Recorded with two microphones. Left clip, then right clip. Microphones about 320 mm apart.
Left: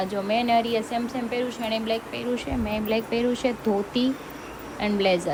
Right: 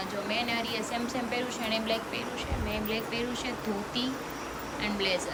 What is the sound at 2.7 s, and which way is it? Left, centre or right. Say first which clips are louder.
A woman's voice: left 8 dB; centre.